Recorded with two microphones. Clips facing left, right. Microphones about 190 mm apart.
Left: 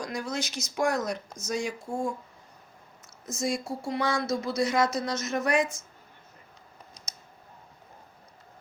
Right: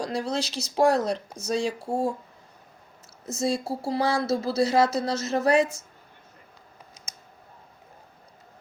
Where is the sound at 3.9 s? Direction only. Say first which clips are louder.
Right 4 dB; 30° right (ahead or behind).